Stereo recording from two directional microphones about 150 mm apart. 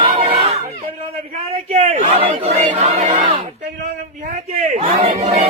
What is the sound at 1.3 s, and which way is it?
Speech, 50° right (ahead or behind).